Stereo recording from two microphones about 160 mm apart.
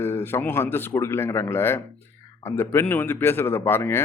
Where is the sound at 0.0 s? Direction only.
15° left (ahead or behind).